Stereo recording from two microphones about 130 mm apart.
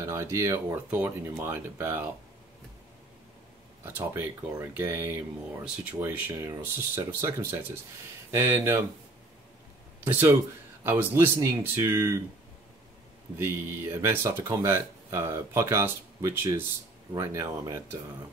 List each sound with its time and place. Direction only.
0.0 s speech: 20° right (ahead or behind)
3.8 s speech: 15° right (ahead or behind)
10.0 s speech: 15° right (ahead or behind)
13.4 s speech: 20° right (ahead or behind)